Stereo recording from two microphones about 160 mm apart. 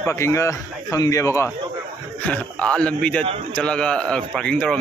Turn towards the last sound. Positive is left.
turn(degrees=5)  # may be behind; listen again after turning